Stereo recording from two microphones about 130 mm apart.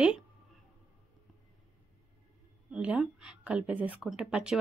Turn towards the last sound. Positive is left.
turn(degrees=-5)  # may be behind; listen again after turning